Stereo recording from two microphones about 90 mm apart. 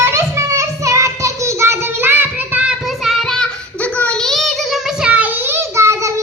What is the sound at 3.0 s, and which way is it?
Child singing, centre (ahead or behind).